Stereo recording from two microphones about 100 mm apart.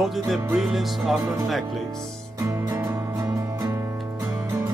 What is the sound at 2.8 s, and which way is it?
Music, 40° right (ahead or behind).